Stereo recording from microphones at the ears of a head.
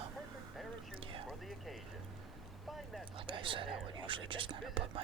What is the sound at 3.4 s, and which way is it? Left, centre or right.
Speech, right.